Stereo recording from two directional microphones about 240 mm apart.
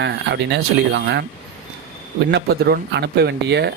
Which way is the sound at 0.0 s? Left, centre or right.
Right.